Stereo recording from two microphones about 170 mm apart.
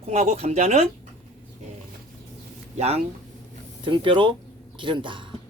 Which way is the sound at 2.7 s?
40° right (ahead or behind).